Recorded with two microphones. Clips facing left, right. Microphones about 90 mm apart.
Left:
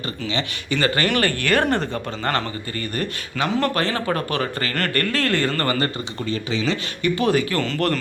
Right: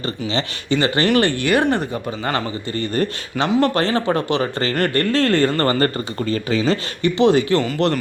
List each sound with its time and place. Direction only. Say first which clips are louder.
0.3 s speech: right 4 dB; 35° right (ahead or behind); by 2.4 s 10° right (ahead or behind)
2.7 s speech: right 7 dB; 30° right (ahead or behind)
7.2 s speech: right 7 dB; 25° right (ahead or behind)